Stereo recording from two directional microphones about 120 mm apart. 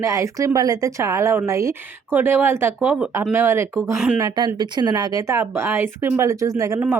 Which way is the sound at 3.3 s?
20° right (ahead or behind).